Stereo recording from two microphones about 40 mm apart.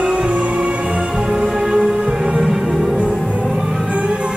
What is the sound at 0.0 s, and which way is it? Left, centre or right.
Music, right.